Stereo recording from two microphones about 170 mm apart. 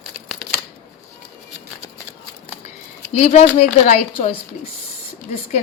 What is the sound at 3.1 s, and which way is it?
A woman's voice, 35° left (ahead or behind).